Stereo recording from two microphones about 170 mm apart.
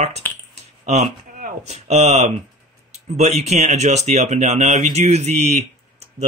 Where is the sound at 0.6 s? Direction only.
40° right (ahead or behind).